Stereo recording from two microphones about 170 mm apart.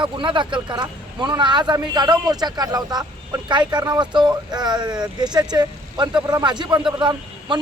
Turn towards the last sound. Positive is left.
turn(degrees=-25)  # may be behind; listen again after turning